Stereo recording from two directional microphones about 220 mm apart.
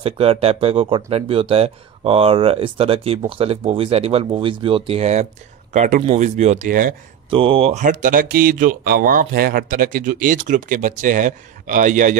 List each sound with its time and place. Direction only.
0.0 s speech: 25° right (ahead or behind)
7.2 s speech: 25° right (ahead or behind)